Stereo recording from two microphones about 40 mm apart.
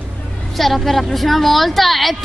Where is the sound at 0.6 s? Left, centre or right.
Centre.